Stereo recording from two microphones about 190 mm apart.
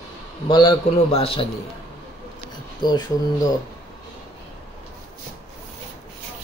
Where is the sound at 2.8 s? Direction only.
20° left (ahead or behind).